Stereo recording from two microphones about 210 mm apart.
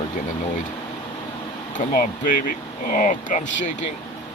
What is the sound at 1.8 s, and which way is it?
Speech, 40° left (ahead or behind).